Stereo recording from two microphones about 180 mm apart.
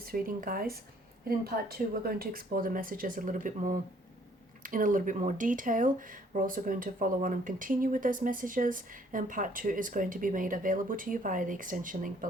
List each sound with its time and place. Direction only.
0.0 s speech: 55° right (ahead or behind)